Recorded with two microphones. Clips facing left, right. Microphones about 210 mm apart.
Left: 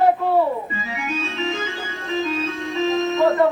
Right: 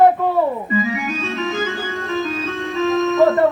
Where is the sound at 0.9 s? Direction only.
40° right (ahead or behind).